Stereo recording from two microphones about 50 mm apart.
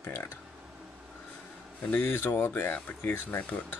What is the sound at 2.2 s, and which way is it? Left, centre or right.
Speech, left.